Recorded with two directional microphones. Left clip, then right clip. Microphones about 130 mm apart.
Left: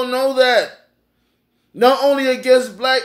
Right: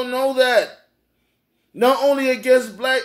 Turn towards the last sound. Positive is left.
turn(degrees=10)  # may be behind; listen again after turning